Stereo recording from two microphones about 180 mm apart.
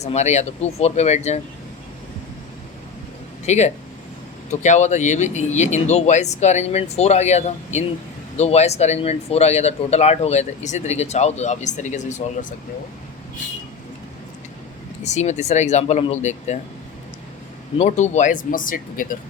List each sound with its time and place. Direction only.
0.0 s speech: 40° left (ahead or behind)
3.4 s speech: 40° left (ahead or behind)
15.0 s speech: 40° left (ahead or behind)
17.7 s speech: 40° left (ahead or behind)